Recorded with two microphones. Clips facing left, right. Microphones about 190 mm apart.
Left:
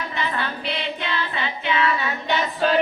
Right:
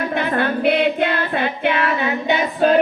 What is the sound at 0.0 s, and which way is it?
Child singing, 55° right (ahead or behind).